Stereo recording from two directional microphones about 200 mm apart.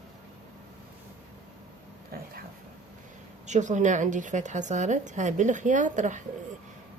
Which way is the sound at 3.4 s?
35° right (ahead or behind).